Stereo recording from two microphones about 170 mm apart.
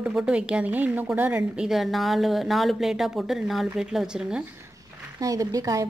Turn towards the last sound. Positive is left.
turn(degrees=-20)  # may be behind; listen again after turning